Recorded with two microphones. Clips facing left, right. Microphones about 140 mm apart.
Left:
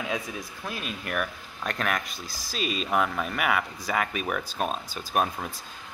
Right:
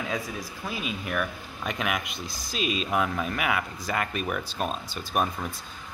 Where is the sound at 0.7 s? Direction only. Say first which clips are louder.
Right 2 dB; 5° right (ahead or behind).